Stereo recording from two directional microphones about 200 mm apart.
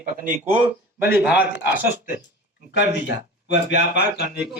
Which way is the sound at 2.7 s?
60° left (ahead or behind).